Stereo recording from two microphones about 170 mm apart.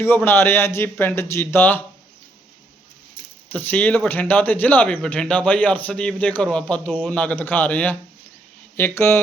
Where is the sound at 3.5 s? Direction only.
10° left (ahead or behind).